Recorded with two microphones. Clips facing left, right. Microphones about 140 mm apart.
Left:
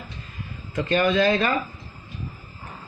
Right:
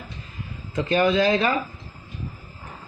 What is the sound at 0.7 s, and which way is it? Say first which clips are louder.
Speech: right 1 dB; 15° right (ahead or behind).